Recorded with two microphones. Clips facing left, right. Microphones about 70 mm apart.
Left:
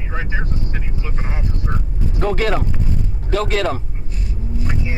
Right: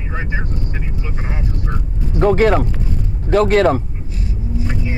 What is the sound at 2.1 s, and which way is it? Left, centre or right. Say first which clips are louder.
Speech: right 7 dB; right.